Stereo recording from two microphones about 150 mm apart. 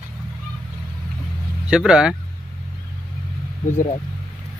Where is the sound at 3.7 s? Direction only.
50° left (ahead or behind).